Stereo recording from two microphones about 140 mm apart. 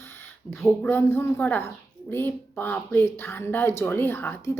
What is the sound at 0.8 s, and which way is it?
Speech, 15° left (ahead or behind).